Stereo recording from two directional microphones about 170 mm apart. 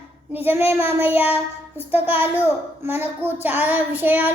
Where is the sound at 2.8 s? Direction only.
10° right (ahead or behind).